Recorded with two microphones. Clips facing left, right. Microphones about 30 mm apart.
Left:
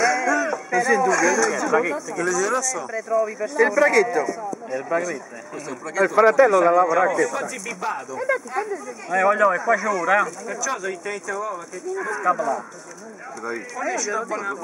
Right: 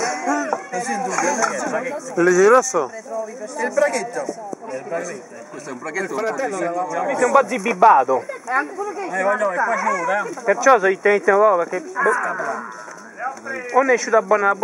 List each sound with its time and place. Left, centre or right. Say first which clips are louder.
0.0 s speech: left 2 dB; centre
2.1 s speech: right 11 dB; centre
3.1 s speech: left 6 dB; left
3.5 s a man's voice: left 3 dB; centre
7.1 s speech: right 2 dB; centre
7.3 s speech: right 12 dB; centre
9.1 s a man's voice: left 3 dB; centre
10.4 s speech: right 12 dB; right
12.1 s speech: left 1 dB; centre
13.7 s speech: right 11 dB; right